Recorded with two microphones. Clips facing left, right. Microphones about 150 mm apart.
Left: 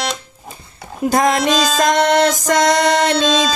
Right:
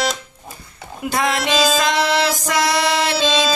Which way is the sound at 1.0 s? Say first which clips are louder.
Left 6 dB; 45° left (ahead or behind).